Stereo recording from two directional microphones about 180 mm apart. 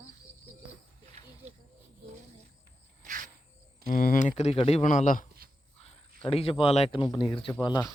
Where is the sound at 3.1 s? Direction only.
45° right (ahead or behind).